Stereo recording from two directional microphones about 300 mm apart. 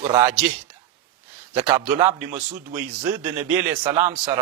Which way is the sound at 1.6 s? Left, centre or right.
Centre.